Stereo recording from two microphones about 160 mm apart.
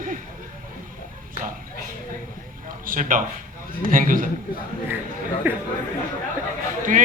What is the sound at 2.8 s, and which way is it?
A man's voice, 55° right (ahead or behind).